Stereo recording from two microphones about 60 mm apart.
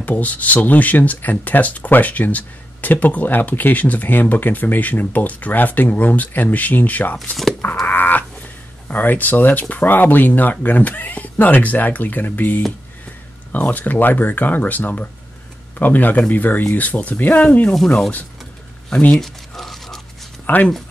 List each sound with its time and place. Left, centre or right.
0.0 s speech: left
7.8 s a sound: left
8.8 s speech: left
18.9 s speech: left
19.1 s crumpling: centre
20.5 s speech: left